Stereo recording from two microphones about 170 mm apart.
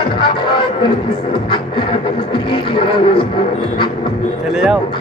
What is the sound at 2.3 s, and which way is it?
Music, 30° left (ahead or behind).